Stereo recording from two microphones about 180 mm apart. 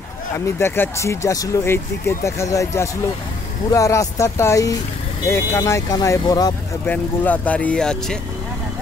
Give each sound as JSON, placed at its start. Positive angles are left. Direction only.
{"t": 0.6, "sound": "speech", "side_deg": 15}
{"t": 6.9, "sound": "speech", "side_deg": 10}